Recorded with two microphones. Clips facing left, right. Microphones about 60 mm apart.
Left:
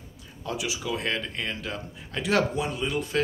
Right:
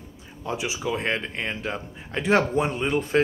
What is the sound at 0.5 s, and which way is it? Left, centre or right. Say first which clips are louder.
A man's voice: right 3 dB; right.